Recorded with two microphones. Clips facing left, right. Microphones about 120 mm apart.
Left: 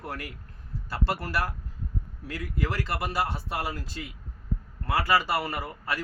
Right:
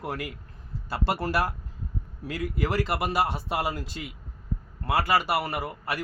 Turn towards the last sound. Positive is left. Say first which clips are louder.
# right 1 dB
turn(degrees=-15)  # may be behind; listen again after turning